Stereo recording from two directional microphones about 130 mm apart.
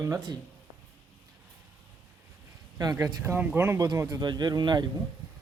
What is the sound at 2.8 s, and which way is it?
Speech, 30° right (ahead or behind).